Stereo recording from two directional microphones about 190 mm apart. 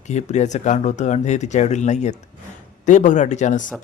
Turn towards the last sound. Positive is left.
turn(degrees=40)  # may be behind; listen again after turning